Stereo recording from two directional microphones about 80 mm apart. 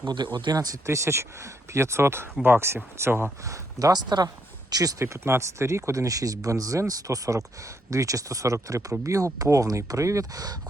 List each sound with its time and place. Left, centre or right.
0.1 s speech: right
0.5 s speech: right
0.9 s speech: right
3.4 s speech: right